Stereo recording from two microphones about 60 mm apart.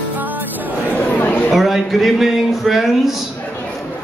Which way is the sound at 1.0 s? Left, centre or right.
Left.